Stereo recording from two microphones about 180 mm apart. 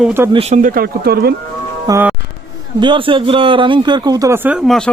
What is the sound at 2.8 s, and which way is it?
A man's voice, 30° right (ahead or behind).